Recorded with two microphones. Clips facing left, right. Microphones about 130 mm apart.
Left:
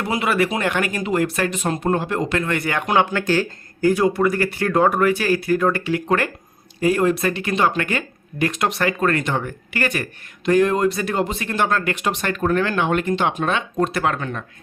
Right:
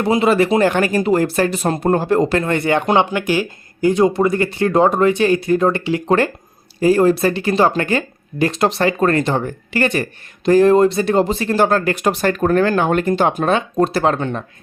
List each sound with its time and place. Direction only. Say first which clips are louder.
0.0 s speech: right 6 dB; 25° right (ahead or behind)